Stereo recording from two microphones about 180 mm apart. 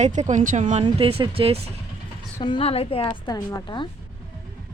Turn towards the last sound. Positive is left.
turn(degrees=25)  # may be behind; listen again after turning